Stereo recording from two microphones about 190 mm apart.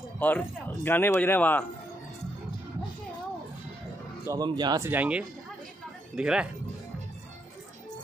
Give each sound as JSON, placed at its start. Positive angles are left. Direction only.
{"t": 0.2, "sound": "speech", "side_deg": 10}
{"t": 4.3, "sound": "speech", "side_deg": -20}